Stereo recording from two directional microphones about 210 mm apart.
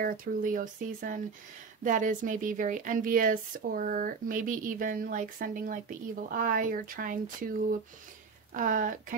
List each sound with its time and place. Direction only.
0.0 s speech: 40° right (ahead or behind)
8.5 s speech: 40° right (ahead or behind)